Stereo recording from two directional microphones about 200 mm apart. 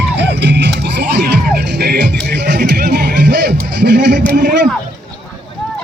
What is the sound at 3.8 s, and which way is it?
Music, 60° right (ahead or behind).